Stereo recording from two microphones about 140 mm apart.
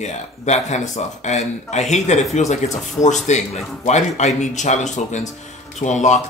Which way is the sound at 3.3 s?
55° left (ahead or behind).